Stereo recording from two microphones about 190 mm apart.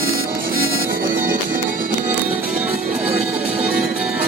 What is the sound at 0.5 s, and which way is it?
Music, 50° right (ahead or behind).